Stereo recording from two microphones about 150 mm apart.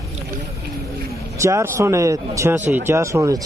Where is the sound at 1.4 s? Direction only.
20° right (ahead or behind).